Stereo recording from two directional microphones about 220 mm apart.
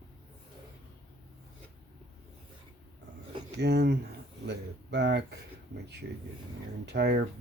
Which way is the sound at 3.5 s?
50° right (ahead or behind).